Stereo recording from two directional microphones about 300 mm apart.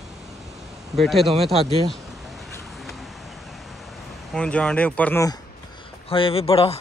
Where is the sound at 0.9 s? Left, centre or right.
Centre.